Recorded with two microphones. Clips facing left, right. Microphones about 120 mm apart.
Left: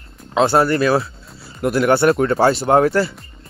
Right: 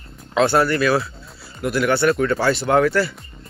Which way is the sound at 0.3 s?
30° left (ahead or behind).